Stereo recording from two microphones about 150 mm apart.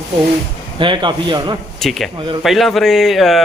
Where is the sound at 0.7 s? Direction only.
30° right (ahead or behind).